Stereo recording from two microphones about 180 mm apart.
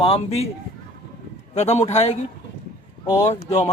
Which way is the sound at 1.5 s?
40° left (ahead or behind).